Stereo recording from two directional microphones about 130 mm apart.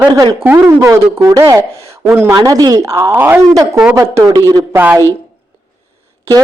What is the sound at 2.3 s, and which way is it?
Speech, 30° right (ahead or behind).